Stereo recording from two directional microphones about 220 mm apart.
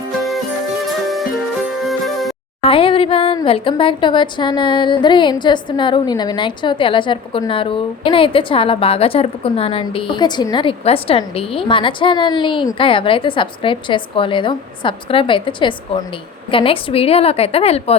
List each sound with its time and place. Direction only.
0.2 s music: centre (ahead or behind)
2.6 s a woman's voice: 25° left (ahead or behind)